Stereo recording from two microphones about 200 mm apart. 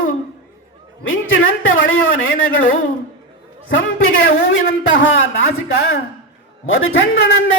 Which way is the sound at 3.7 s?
80° left.